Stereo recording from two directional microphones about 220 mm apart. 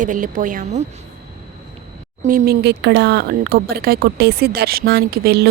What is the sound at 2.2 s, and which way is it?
Speech, 40° right (ahead or behind).